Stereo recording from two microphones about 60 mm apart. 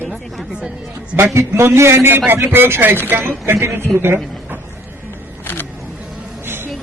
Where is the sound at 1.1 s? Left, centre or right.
Right.